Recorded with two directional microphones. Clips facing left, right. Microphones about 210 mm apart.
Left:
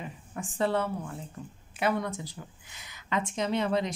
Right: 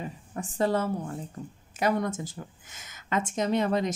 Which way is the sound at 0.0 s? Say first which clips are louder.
Right 3 dB; 40° right (ahead or behind).